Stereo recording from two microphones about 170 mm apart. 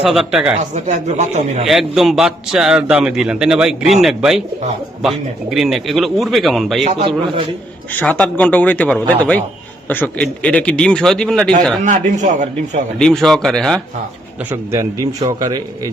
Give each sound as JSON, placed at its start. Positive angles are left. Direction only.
{"t": 0.0, "sound": "a man's voice", "side_deg": -5}
{"t": 0.7, "sound": "speech", "side_deg": -45}
{"t": 1.6, "sound": "a man's voice", "side_deg": 0}
{"t": 7.9, "sound": "a man's voice", "side_deg": 5}
{"t": 11.8, "sound": "speech", "side_deg": -45}
{"t": 13.0, "sound": "a man's voice", "side_deg": 0}
{"t": 14.5, "sound": "a man's voice", "side_deg": -20}